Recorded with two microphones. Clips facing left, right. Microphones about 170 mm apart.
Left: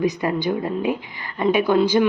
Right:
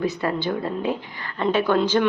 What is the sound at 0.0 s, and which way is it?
A woman's voice, 15° left (ahead or behind).